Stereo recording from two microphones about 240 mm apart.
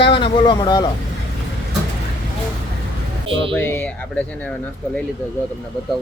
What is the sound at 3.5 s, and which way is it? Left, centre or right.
Speech, centre.